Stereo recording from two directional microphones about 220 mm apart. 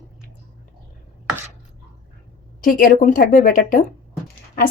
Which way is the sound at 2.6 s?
40° left (ahead or behind).